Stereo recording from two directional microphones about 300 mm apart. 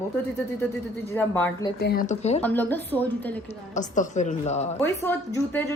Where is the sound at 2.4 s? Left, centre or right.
Centre.